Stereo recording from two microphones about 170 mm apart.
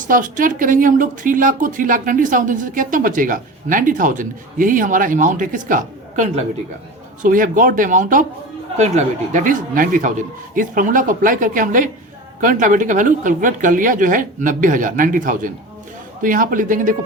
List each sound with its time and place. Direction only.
0.0 s a woman's voice: 50° right (ahead or behind)